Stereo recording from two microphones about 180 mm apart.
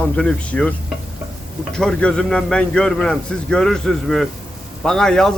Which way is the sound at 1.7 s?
5° left (ahead or behind).